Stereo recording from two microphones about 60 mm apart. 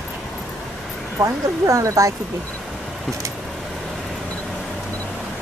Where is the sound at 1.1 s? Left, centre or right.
Right.